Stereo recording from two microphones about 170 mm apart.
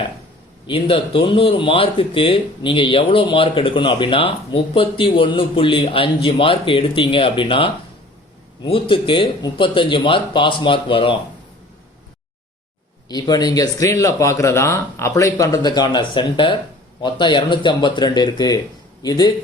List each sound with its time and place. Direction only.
0.7 s speech: 30° left (ahead or behind)
13.1 s speech: 25° left (ahead or behind)